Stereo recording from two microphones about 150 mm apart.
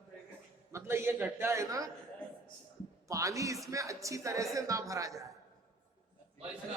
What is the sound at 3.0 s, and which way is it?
A woman's voice, 20° right (ahead or behind).